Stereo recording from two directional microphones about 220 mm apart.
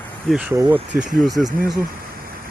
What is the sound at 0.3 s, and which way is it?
Speech, 5° right (ahead or behind).